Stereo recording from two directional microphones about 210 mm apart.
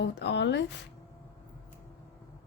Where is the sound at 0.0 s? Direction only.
55° left (ahead or behind).